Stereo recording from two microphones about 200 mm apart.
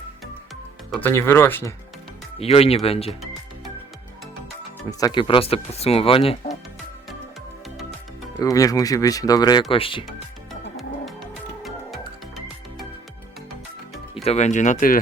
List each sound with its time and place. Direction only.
0.9 s speech: 10° left (ahead or behind)
2.4 s speech: 30° left (ahead or behind)
3.1 s music: centre (ahead or behind)
4.9 s speech: 20° left (ahead or behind)
8.4 s speech: 15° left (ahead or behind)
10.1 s music: centre (ahead or behind)
14.3 s speech: 35° left (ahead or behind)